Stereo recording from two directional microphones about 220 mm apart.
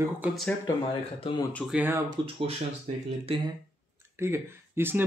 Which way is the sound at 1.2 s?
25° left (ahead or behind).